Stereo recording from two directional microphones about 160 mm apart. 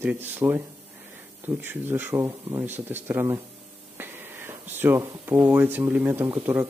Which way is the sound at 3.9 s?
15° right (ahead or behind).